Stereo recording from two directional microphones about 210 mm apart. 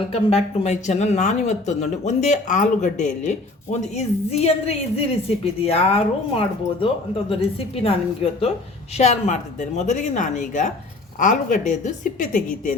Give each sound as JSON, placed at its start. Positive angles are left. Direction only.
{"t": 0.1, "sound": "speech", "side_deg": 30}
{"t": 7.8, "sound": "a woman's voice", "side_deg": 25}